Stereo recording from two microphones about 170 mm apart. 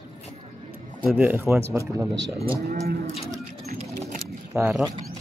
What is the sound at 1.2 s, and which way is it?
Speech, 15° right (ahead or behind).